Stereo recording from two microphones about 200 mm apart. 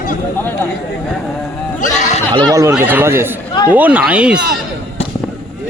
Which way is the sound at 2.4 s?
15° right (ahead or behind).